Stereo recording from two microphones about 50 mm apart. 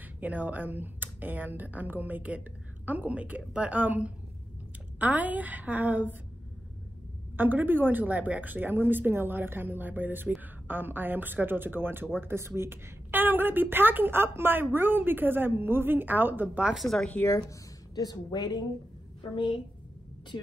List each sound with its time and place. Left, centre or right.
0.2 s speech: right
7.3 s a woman's voice: right
13.1 s a woman's voice: right
16.7 s speech: centre
17.2 s speech: left